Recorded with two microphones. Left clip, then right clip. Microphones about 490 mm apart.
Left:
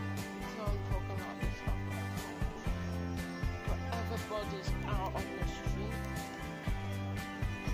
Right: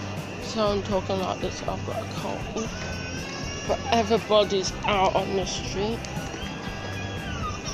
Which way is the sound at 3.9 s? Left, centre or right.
Left.